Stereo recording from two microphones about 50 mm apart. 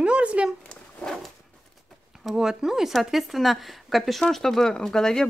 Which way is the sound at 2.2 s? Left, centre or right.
Centre.